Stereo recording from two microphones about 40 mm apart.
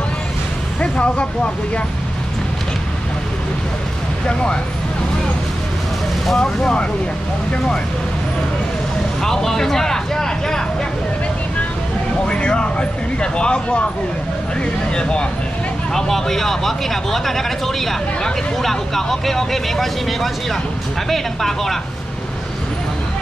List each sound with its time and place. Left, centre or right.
0.7 s speech: left
4.3 s speech: left
6.3 s speech: centre
9.2 s a sound: centre
12.3 s speech: left
15.0 s speech: left
15.9 s speech: centre